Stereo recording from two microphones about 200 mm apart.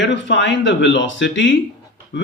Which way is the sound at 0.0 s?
65° left (ahead or behind).